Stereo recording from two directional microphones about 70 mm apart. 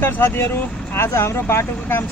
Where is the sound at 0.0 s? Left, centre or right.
Left.